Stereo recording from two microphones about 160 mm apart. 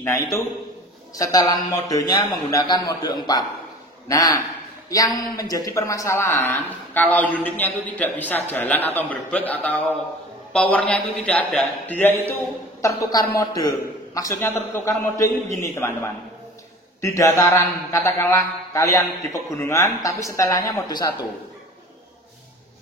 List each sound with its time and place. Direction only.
0.0 s a man's voice: 15° left (ahead or behind)